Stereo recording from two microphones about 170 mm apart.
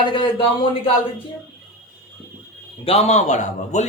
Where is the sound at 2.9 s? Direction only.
40° left (ahead or behind).